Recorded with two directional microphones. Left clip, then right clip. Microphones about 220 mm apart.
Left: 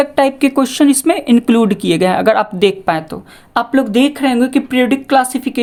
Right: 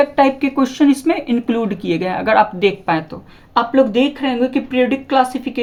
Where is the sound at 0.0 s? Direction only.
50° left (ahead or behind).